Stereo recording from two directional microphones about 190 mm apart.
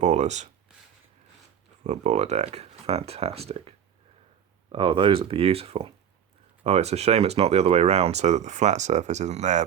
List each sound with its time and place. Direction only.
0.0 s speech: 35° right (ahead or behind)
1.8 s speech: 35° right (ahead or behind)